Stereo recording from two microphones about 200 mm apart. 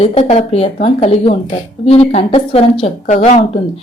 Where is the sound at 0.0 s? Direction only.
30° left (ahead or behind).